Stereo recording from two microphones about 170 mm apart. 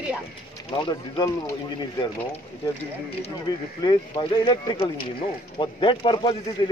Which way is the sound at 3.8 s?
25° left (ahead or behind).